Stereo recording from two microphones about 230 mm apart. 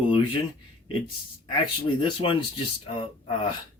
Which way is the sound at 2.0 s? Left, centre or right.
Left.